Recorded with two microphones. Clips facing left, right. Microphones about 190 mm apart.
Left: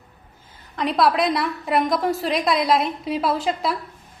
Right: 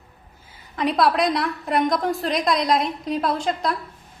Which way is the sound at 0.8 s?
Centre (ahead or behind).